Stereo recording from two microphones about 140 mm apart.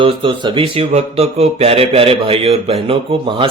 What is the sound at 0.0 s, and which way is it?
Speech, 40° right (ahead or behind).